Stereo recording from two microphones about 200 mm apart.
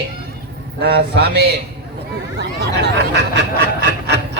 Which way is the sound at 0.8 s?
55° right (ahead or behind).